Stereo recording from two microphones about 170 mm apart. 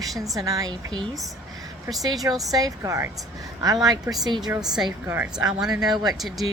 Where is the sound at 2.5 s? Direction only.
20° right (ahead or behind).